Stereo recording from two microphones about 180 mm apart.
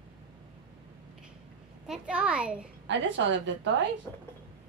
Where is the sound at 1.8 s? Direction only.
5° right (ahead or behind).